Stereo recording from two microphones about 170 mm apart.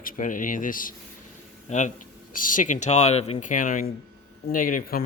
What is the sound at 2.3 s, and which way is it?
Speech, 50° left (ahead or behind).